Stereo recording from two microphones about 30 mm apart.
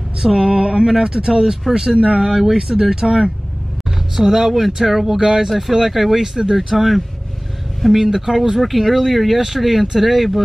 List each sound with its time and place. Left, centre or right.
0.2 s speech: centre